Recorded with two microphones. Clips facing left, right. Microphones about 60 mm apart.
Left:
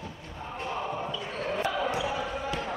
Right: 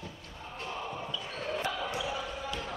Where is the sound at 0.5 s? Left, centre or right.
Left.